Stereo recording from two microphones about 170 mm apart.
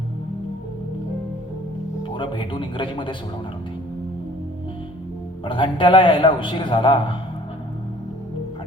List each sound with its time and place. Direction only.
2.0 s a man's voice: 30° left (ahead or behind)
5.5 s a man's voice: 30° left (ahead or behind)